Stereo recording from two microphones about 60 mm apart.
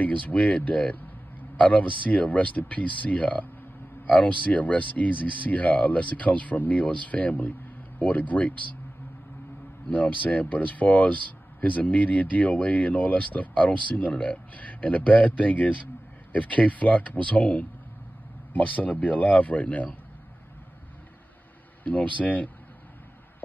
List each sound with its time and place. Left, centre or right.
0.0 s speech: left
9.8 s speech: left
21.8 s speech: left